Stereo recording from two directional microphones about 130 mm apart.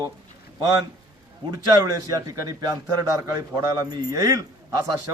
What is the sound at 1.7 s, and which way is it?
A man's voice, 30° right (ahead or behind).